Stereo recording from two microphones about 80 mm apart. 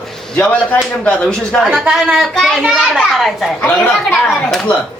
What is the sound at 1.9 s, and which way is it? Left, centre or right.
Speech, centre.